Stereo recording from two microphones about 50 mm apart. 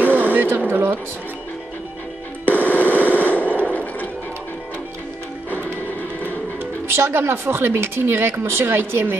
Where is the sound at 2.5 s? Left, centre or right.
Left.